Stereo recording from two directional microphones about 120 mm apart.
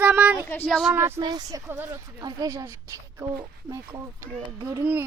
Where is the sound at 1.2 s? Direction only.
35° right (ahead or behind).